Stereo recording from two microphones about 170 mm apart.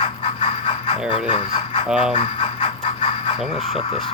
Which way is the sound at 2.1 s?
30° left (ahead or behind).